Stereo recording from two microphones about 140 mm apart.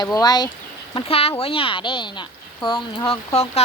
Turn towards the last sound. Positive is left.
turn(degrees=50)  # may be behind; listen again after turning